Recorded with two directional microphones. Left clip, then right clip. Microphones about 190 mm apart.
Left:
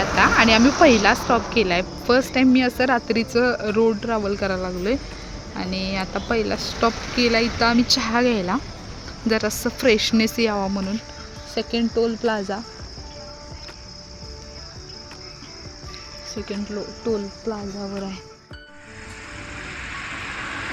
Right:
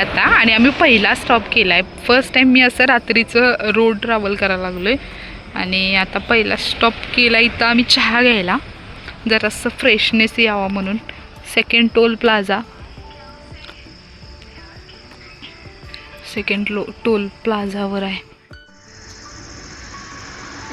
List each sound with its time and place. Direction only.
0.2 s speech: 5° left (ahead or behind)
11.9 s speech: 5° right (ahead or behind)
16.3 s speech: 10° right (ahead or behind)
17.5 s speech: 40° right (ahead or behind)